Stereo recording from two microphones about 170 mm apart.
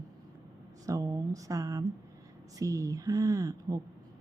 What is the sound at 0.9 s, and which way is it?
Speech, 20° right (ahead or behind).